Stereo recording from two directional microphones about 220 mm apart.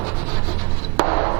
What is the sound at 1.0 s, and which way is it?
Chopping, 15° right (ahead or behind).